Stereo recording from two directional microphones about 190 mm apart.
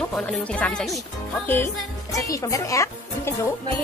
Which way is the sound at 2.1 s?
15° left (ahead or behind).